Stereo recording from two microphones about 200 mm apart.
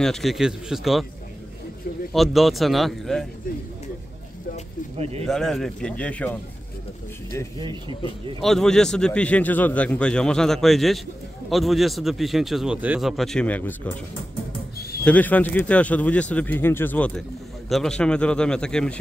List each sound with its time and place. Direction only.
0.0 s a man's voice: centre (ahead or behind)
2.1 s a man's voice: centre (ahead or behind)
4.9 s speech: 30° right (ahead or behind)
5.2 s a man's voice: centre (ahead or behind)
8.4 s a man's voice: centre (ahead or behind)
14.8 s a sound: 50° left (ahead or behind)
15.0 s a man's voice: 10° left (ahead or behind)